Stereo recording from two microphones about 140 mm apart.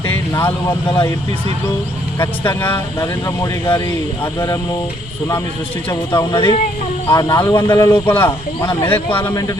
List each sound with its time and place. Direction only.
0.3 s speech: 20° left (ahead or behind)
2.1 s a man's voice: 20° left (ahead or behind)
5.9 s speech: 20° left (ahead or behind)
7.1 s speech: 30° left (ahead or behind)
7.5 s a man's voice: 20° left (ahead or behind)